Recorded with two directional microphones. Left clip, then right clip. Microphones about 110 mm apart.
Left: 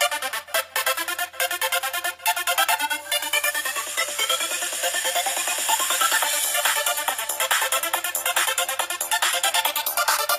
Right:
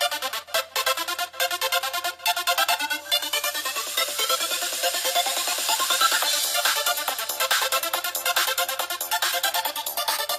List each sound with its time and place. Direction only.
1.4 s music: 25° right (ahead or behind)
4.8 s music: 30° right (ahead or behind)
9.5 s music: 20° right (ahead or behind)